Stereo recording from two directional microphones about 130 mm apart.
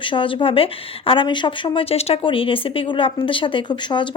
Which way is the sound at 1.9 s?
45° left (ahead or behind).